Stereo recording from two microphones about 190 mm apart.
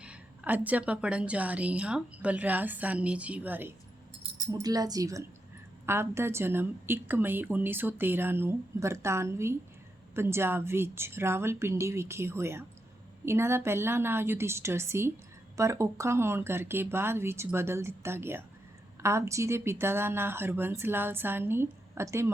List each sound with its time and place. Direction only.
0.0 s a woman's voice: 5° right (ahead or behind)